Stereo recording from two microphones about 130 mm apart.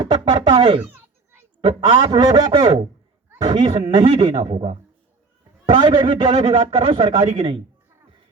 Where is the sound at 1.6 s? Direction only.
45° right (ahead or behind).